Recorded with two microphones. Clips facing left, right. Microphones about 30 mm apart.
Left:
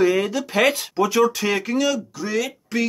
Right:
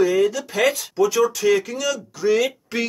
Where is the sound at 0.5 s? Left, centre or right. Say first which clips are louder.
Left 1 dB; left.